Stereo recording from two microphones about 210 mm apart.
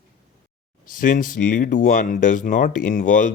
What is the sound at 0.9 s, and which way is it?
Speech, 40° left (ahead or behind).